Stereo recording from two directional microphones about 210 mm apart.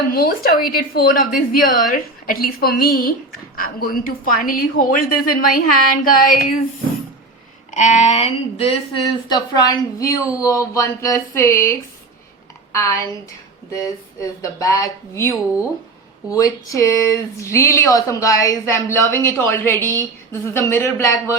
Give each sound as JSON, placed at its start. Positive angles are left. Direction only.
{"t": 0.1, "sound": "a woman's voice", "side_deg": 45}
{"t": 7.7, "sound": "speech", "side_deg": 35}
{"t": 9.0, "sound": "speech", "side_deg": 20}